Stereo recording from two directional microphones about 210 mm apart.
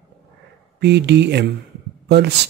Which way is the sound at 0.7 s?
55° right (ahead or behind).